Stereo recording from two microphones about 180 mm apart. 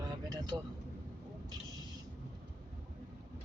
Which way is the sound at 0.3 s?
25° right (ahead or behind).